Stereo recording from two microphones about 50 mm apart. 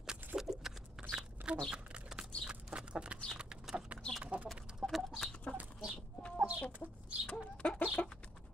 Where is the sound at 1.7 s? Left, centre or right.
Centre.